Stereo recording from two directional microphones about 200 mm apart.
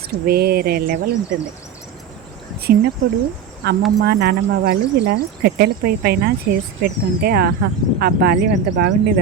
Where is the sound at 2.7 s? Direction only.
50° right (ahead or behind).